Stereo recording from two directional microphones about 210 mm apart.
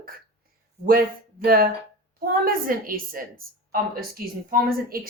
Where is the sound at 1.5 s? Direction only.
45° right (ahead or behind).